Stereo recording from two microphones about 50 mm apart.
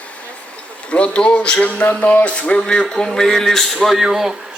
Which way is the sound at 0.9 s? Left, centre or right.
Left.